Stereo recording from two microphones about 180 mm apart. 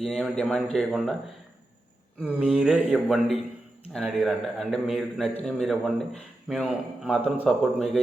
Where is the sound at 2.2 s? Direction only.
5° right (ahead or behind).